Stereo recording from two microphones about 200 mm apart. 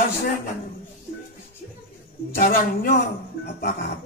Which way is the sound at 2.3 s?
45° left (ahead or behind).